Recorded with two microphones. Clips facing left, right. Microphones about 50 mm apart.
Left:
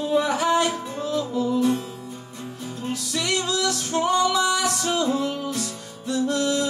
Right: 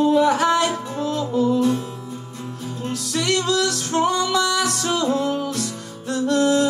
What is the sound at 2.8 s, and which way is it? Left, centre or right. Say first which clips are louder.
Music: right 3 dB; right.